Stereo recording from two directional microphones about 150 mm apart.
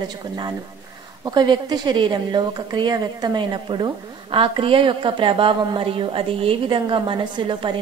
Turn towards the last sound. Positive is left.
turn(degrees=-30)  # may be behind; listen again after turning